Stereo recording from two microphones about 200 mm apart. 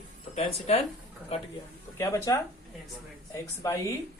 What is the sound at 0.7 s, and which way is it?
Speech, 35° left (ahead or behind).